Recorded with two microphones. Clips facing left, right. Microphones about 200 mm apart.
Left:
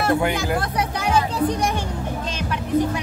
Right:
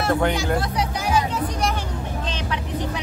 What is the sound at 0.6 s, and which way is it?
Music, 55° left (ahead or behind).